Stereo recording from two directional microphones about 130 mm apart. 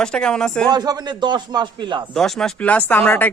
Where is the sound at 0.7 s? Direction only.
30° right (ahead or behind).